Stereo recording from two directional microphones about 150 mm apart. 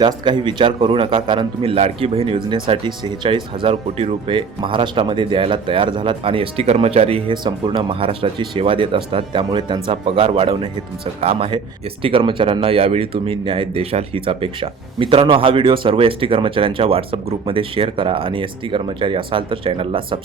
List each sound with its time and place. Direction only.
0.0 s a man's voice: 30° right (ahead or behind)